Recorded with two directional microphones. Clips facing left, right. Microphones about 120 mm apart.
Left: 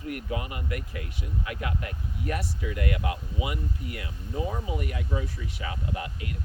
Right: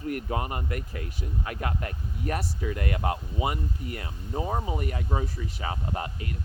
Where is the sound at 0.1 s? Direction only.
40° right (ahead or behind).